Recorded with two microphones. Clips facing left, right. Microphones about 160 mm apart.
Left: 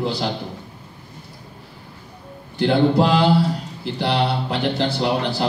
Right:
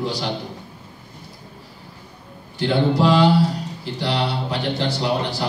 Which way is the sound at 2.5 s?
60° left (ahead or behind).